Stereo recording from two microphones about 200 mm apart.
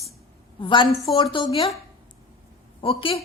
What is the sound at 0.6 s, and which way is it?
Speech, 25° left (ahead or behind).